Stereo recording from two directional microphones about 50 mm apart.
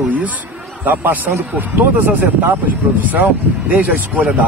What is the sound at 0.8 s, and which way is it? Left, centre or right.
A man's voice, right.